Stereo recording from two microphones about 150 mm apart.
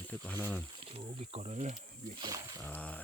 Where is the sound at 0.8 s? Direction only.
40° right (ahead or behind).